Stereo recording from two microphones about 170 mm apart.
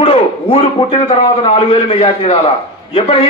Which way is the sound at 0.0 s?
30° left (ahead or behind).